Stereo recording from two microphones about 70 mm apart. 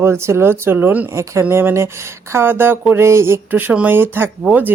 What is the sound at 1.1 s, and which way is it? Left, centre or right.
A woman's voice, right.